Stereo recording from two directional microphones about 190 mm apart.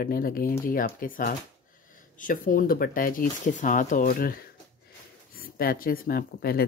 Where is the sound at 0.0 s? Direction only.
50° left (ahead or behind).